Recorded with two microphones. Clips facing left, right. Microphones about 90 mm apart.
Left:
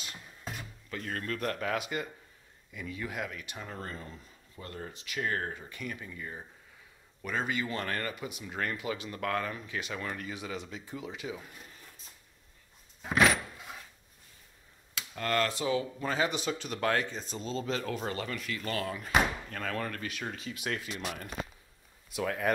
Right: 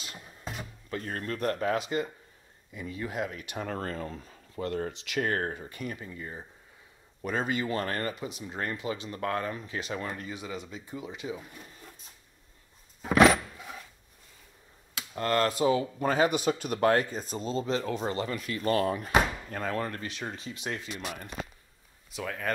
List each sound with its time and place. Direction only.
0.0 s a sound: 35° right (ahead or behind)
2.7 s speech: 30° right (ahead or behind)
3.4 s speech: 60° right (ahead or behind)
4.9 s speech: 75° right (ahead or behind); by 11.4 s 20° right (ahead or behind)
15.1 s speech: 35° right (ahead or behind)
16.1 s speech: 50° right (ahead or behind)
19.5 s speech: 25° right (ahead or behind)
22.1 s speech: 5° left (ahead or behind)